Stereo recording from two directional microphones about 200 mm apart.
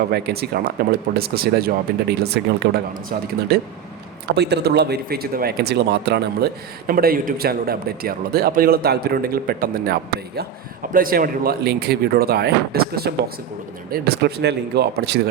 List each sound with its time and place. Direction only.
0.1 s speech: 55° right (ahead or behind)